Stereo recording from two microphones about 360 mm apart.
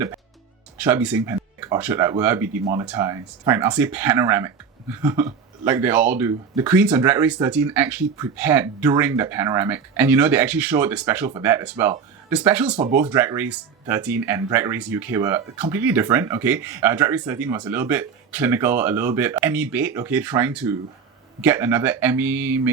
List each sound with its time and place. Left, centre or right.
0.8 s speech: centre